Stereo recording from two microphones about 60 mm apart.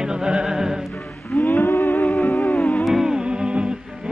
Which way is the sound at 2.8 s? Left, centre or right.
Centre.